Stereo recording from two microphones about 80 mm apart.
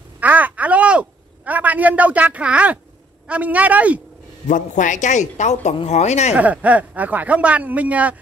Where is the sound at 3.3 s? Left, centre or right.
Centre.